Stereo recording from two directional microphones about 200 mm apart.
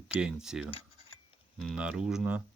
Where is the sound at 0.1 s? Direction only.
5° right (ahead or behind).